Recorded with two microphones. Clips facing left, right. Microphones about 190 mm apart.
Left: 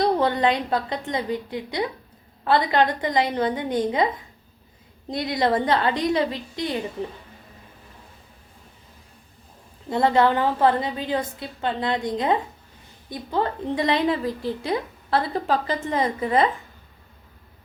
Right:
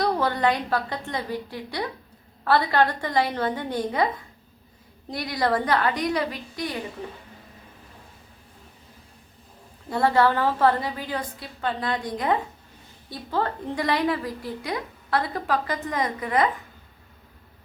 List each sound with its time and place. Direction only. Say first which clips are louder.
0.0 s a woman's voice: left 3 dB; 20° left (ahead or behind)
9.9 s a woman's voice: left 2 dB; 20° left (ahead or behind)